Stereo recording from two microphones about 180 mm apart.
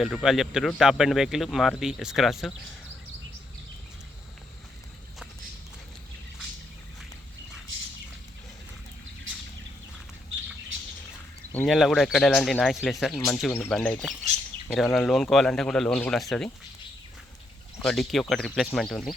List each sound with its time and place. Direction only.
0.0 s speech: centre (ahead or behind)
11.5 s speech: centre (ahead or behind)
17.8 s speech: centre (ahead or behind)